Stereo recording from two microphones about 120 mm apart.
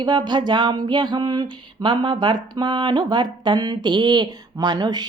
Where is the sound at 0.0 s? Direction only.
35° right (ahead or behind).